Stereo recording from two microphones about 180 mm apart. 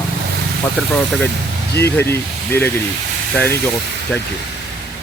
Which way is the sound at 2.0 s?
10° left (ahead or behind).